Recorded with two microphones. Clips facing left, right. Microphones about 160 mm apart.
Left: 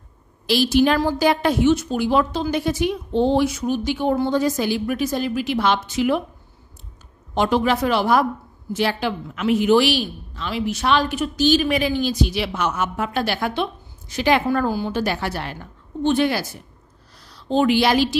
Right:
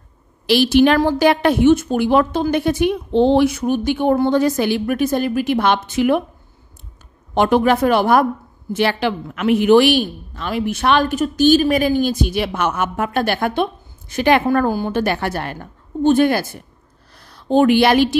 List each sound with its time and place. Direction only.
0.5 s a woman's voice: 65° right (ahead or behind)
7.3 s a woman's voice: 55° right (ahead or behind)
8.7 s a woman's voice: 65° right (ahead or behind)
17.1 s a sound: 55° right (ahead or behind)